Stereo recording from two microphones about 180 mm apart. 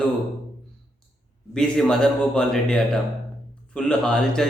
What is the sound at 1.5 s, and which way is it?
Speech, 5° left (ahead or behind).